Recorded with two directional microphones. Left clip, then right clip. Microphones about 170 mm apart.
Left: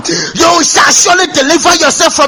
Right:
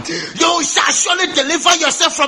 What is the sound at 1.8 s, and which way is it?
Speech, 60° left (ahead or behind).